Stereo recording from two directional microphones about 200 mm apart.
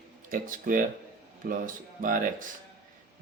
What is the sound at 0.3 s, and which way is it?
Speech, 40° right (ahead or behind).